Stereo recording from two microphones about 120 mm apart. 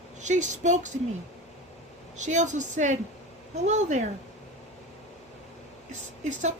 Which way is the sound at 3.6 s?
75° right (ahead or behind).